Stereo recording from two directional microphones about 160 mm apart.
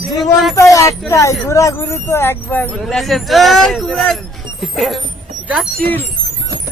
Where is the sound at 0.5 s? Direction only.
20° left (ahead or behind).